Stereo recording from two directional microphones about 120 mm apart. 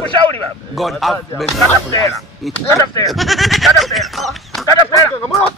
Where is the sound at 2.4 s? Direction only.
Centre (ahead or behind).